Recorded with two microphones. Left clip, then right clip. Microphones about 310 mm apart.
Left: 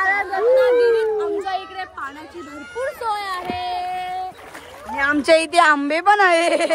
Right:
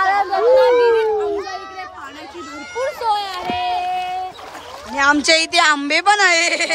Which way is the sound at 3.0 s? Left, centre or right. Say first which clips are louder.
Right 5 dB; centre.